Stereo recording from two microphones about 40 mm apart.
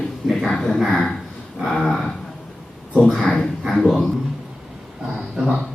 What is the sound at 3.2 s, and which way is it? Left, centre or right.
Speech, centre.